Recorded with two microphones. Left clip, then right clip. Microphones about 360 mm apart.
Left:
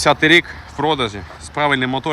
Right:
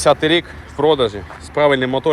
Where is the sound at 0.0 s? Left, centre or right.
Centre.